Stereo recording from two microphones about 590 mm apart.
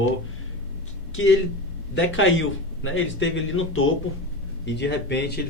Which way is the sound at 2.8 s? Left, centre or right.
Centre.